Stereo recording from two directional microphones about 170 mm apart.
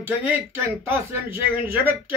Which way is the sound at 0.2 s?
15° right (ahead or behind).